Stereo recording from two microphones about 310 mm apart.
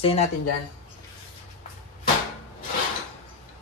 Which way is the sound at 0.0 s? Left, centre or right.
Centre.